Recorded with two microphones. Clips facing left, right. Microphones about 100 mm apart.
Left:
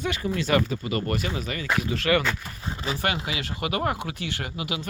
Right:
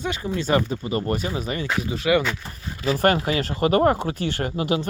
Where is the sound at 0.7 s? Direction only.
30° right (ahead or behind).